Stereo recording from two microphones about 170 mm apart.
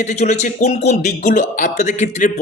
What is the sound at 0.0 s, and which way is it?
A man's voice, 45° left (ahead or behind).